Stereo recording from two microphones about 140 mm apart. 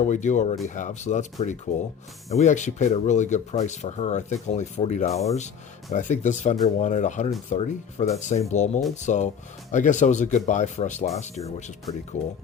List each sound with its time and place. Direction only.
0.0 s speech: 60° left (ahead or behind)